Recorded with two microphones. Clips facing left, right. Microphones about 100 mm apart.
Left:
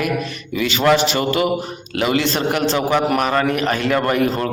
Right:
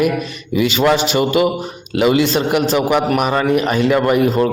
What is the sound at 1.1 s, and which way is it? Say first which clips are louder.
A man's voice: right 3 dB; 15° right (ahead or behind).